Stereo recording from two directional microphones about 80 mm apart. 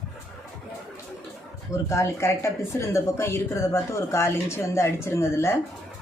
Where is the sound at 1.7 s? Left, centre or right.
Left.